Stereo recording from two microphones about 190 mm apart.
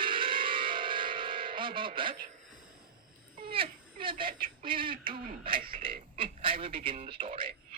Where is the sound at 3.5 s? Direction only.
25° right (ahead or behind).